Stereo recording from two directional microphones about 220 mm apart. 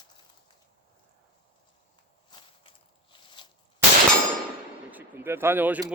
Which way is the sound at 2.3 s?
25° left (ahead or behind).